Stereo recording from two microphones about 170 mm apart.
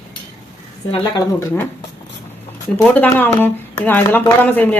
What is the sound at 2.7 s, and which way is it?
Speech, 10° left (ahead or behind).